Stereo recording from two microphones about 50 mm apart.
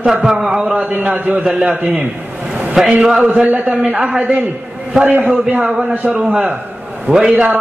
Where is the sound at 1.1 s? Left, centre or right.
Right.